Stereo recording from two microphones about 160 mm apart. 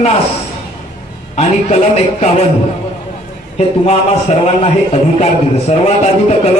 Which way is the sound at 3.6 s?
40° left (ahead or behind).